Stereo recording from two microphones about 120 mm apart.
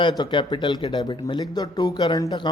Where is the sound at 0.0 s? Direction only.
40° left (ahead or behind).